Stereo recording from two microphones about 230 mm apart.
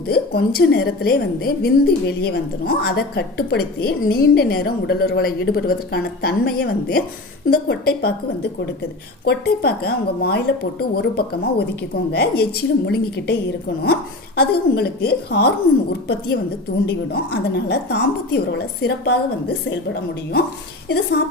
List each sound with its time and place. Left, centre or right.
0.1 s a woman's voice: left
9.2 s a woman's voice: left